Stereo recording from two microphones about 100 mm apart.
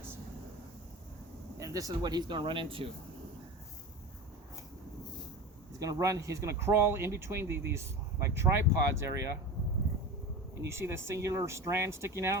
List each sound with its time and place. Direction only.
1.5 s speech: 35° right (ahead or behind); by 2.8 s 60° right (ahead or behind)
5.8 s speech: 35° right (ahead or behind)
10.7 s speech: 25° right (ahead or behind)